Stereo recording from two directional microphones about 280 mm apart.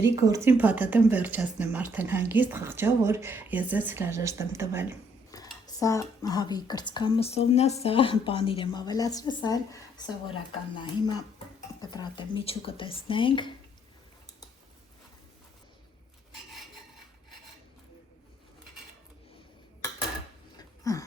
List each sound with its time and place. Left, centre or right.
0.0 s speech: centre
5.3 s speech: centre
20.6 s a sound: centre